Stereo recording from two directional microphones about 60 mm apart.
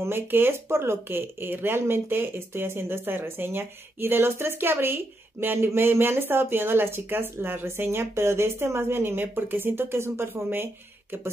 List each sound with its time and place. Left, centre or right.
0.0 s speech: right